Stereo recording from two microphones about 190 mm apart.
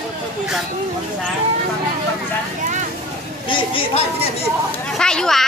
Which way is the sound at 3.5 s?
30° left (ahead or behind).